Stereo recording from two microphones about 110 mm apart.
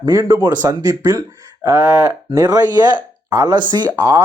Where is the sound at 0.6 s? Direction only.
30° right (ahead or behind).